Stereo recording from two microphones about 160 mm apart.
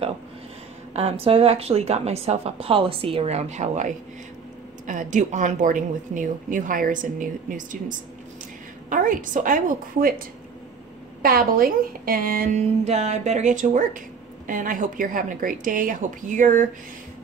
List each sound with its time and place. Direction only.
0.9 s a woman's voice: 40° right (ahead or behind); by 10.2 s 60° right (ahead or behind)
11.2 s a woman's voice: 65° right (ahead or behind)
12.8 s a woman's voice: 45° right (ahead or behind)